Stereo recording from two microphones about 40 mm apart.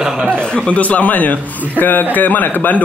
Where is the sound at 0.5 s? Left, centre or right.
Left.